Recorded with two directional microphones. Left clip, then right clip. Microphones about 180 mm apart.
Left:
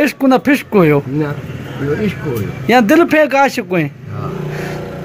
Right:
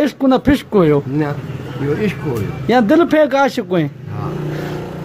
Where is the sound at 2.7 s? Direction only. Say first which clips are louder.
Left 2 dB; centre (ahead or behind).